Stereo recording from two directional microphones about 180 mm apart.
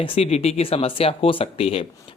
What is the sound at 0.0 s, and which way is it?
Speech, 30° left (ahead or behind).